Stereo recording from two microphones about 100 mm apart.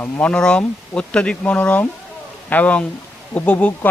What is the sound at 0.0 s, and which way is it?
Speech, 10° left (ahead or behind).